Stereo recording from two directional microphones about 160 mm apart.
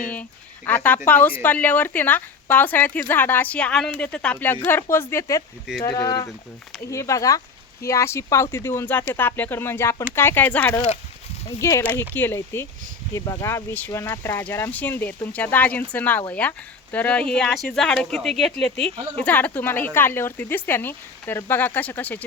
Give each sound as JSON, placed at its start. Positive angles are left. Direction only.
{"t": 0.0, "sound": "speech", "side_deg": 10}